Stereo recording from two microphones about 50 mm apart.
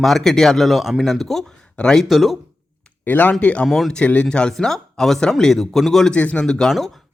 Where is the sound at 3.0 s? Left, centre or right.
Left.